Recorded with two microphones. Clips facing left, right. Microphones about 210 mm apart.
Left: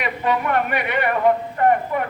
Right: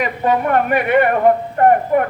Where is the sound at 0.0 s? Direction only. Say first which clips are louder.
Right 5 dB; 45° right (ahead or behind).